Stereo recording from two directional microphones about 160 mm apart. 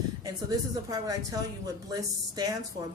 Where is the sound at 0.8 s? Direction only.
20° right (ahead or behind).